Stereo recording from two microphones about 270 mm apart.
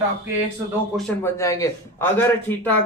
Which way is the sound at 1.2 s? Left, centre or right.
Centre.